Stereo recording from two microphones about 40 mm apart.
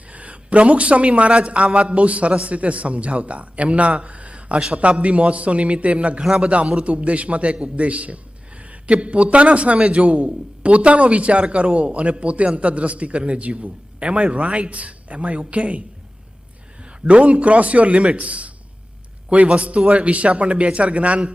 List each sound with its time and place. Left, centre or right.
0.1 s a man's voice: right
6.2 s a man's voice: centre
6.7 s a man's voice: right
17.1 s a man's voice: right